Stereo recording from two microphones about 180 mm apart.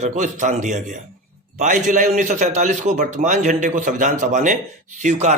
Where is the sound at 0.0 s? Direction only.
45° right (ahead or behind).